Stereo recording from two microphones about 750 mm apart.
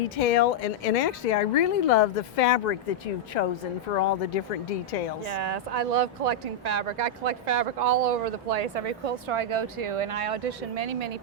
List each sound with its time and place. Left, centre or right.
0.2 s a woman's voice: left
3.9 s speech: left
5.3 s speech: right